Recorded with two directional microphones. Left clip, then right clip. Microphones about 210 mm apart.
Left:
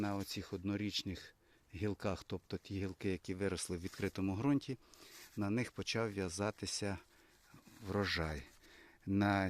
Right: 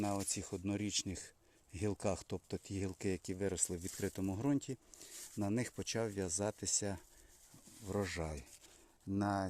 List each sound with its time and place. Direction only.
0.0 s speech: centre (ahead or behind)
9.2 s speech: 30° left (ahead or behind)